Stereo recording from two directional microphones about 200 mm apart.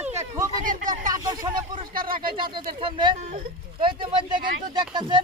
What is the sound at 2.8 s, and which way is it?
Speech, 25° right (ahead or behind).